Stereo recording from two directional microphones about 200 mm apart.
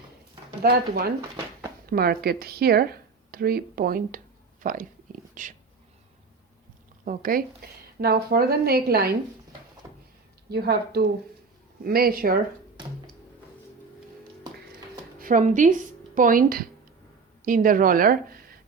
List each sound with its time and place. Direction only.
0.6 s speech: 50° right (ahead or behind)
7.0 s speech: 45° right (ahead or behind)
9.8 s a sound: 15° right (ahead or behind)
10.5 s speech: 50° right (ahead or behind)
15.2 s speech: 40° right (ahead or behind)